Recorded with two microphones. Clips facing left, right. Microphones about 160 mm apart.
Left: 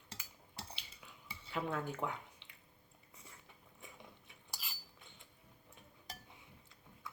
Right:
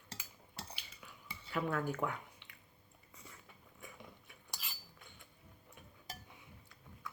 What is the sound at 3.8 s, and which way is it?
Biting, 25° left (ahead or behind).